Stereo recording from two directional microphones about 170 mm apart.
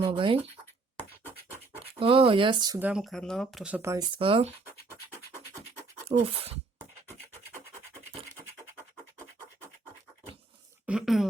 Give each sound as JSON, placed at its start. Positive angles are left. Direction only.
{"t": 0.2, "sound": "speech", "side_deg": -35}
{"t": 1.8, "sound": "speech", "side_deg": -30}
{"t": 2.7, "sound": "speech", "side_deg": -5}
{"t": 6.1, "sound": "speech", "side_deg": -35}
{"t": 8.7, "sound": "scratch", "side_deg": -15}
{"t": 10.8, "sound": "a sound", "side_deg": -5}